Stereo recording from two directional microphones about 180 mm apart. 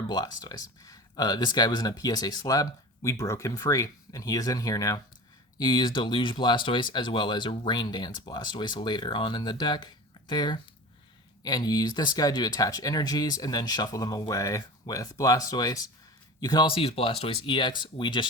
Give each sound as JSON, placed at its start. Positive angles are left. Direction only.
{"t": 0.1, "sound": "speech", "side_deg": 20}